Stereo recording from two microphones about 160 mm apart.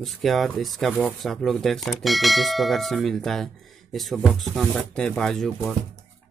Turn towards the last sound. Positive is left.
turn(degrees=0)  # may be behind; listen again after turning